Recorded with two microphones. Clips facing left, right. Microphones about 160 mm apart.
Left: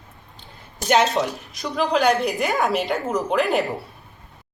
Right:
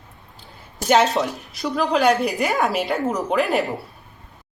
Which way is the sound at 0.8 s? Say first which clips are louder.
Right 1 dB; centre (ahead or behind).